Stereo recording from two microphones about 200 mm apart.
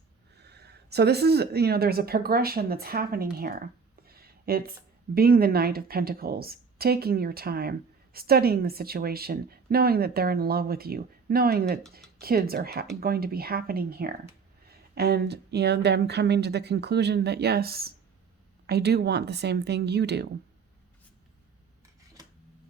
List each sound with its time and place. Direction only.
0.4 s a woman's voice: 55° right (ahead or behind)
4.0 s a sound: 50° right (ahead or behind)
5.1 s a woman's voice: 50° right (ahead or behind)